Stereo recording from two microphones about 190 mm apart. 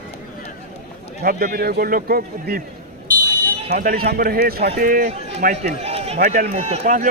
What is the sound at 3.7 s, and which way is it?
A man's voice, 50° right (ahead or behind).